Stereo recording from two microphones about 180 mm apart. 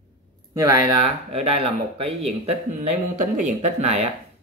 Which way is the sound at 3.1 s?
45° right (ahead or behind).